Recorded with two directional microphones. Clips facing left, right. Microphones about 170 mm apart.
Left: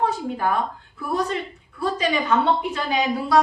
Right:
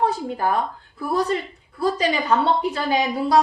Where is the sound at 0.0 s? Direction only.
35° right (ahead or behind).